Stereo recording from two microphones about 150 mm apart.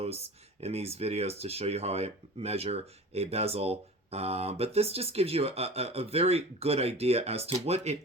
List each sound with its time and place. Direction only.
0.6 s speech: 45° right (ahead or behind)